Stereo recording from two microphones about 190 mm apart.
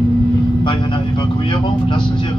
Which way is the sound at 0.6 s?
25° left (ahead or behind).